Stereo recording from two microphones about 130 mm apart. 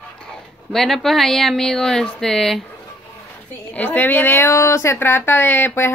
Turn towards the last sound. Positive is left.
turn(degrees=15)  # may be behind; listen again after turning